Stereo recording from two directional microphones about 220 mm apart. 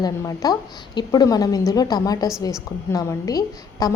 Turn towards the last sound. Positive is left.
turn(degrees=15)  # may be behind; listen again after turning